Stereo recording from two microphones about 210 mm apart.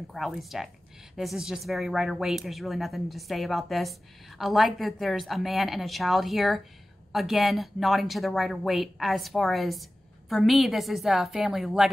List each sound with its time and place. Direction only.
0.1 s speech: centre (ahead or behind)